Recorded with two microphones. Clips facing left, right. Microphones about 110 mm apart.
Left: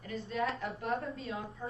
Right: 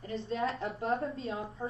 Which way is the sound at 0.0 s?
30° right (ahead or behind).